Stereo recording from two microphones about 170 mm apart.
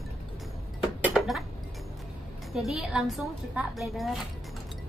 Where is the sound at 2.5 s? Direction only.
Centre (ahead or behind).